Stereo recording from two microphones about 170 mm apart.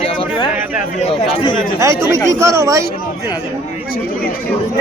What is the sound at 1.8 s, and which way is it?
Speech, 15° right (ahead or behind).